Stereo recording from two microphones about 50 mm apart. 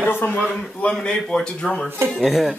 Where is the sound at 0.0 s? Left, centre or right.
Left.